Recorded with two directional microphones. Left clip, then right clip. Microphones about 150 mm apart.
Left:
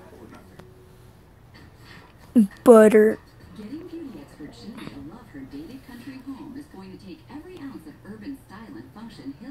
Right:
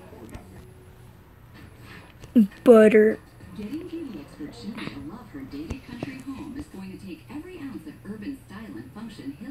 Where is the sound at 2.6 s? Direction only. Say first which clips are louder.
Left 2 dB; 15° left (ahead or behind).